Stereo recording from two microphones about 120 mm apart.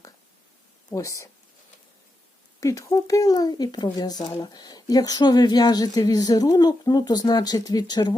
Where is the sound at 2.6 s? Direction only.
25° left (ahead or behind).